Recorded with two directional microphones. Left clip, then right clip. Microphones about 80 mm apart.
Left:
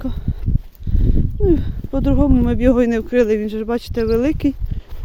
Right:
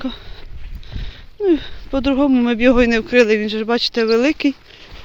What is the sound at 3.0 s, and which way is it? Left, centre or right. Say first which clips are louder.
Speech: right 3 dB; left.